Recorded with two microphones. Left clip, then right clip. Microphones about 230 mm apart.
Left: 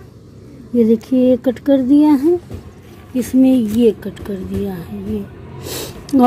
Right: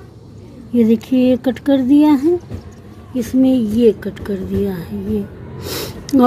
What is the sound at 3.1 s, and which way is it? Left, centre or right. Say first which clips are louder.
A woman's voice: left 1 dB; centre.